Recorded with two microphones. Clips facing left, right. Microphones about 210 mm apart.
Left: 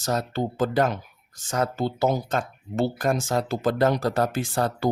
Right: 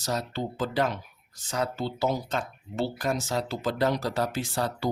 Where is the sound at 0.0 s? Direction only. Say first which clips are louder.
Left 4 dB; 50° left (ahead or behind).